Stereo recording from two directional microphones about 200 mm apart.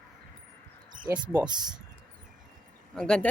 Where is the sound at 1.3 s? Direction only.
5° right (ahead or behind).